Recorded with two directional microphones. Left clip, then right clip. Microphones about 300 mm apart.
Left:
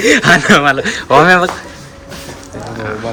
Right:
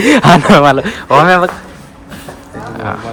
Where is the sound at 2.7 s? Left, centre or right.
Centre.